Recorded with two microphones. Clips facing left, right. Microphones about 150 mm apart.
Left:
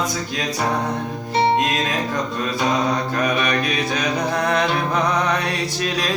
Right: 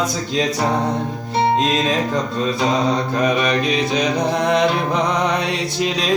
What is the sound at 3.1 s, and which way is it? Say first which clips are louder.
Mantra: right 3 dB; 20° right (ahead or behind).